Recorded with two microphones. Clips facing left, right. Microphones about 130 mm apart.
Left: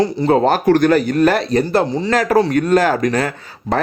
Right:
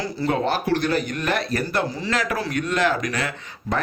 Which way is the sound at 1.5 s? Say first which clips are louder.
Left 9 dB; 25° left (ahead or behind).